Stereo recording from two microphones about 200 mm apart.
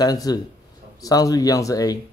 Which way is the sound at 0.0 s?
20° left (ahead or behind).